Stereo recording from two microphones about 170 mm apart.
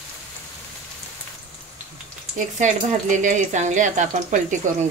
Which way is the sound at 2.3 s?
45° right (ahead or behind).